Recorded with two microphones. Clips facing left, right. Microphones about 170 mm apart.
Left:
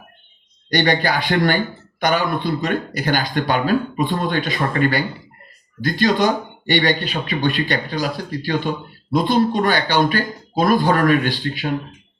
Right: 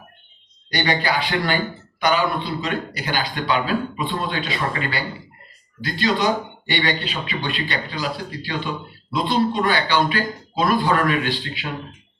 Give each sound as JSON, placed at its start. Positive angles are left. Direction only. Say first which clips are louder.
{"t": 0.7, "sound": "speech", "louder": "left 4 dB", "side_deg": 45}